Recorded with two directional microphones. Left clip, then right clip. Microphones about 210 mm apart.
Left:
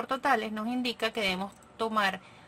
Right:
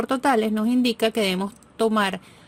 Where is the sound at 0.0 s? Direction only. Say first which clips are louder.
Right 7 dB; 30° right (ahead or behind).